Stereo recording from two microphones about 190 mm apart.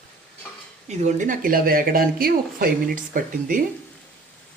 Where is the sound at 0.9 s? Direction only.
40° right (ahead or behind).